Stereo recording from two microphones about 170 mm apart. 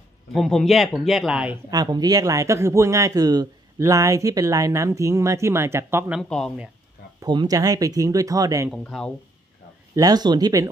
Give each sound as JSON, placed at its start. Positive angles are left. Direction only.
{"t": 0.3, "sound": "speech", "side_deg": 0}
{"t": 1.7, "sound": "a man's voice", "side_deg": -20}
{"t": 6.2, "sound": "speech", "side_deg": 5}
{"t": 7.2, "sound": "a man's voice", "side_deg": -25}
{"t": 8.6, "sound": "speech", "side_deg": 5}
{"t": 9.9, "sound": "a man's voice", "side_deg": -20}